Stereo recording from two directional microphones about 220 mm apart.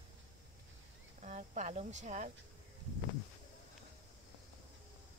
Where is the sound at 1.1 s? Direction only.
30° right (ahead or behind).